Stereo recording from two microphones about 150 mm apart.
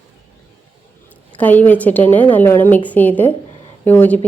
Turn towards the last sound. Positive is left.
turn(degrees=10)  # may be behind; listen again after turning